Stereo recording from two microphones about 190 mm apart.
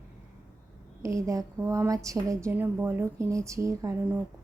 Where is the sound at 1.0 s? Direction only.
15° right (ahead or behind).